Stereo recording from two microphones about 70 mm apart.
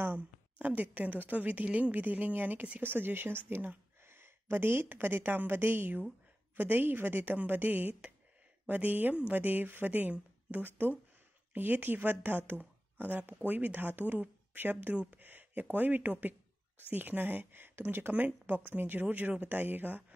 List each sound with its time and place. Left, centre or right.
0.0 s a woman's voice: right